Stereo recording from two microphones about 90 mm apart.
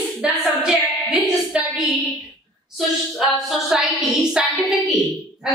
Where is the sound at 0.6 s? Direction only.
5° right (ahead or behind).